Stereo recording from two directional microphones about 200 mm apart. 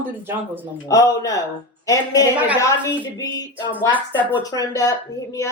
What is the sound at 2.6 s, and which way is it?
A woman's voice, 15° left (ahead or behind).